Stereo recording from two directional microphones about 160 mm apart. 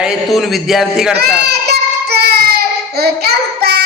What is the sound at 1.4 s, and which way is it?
Child singing, 90° right.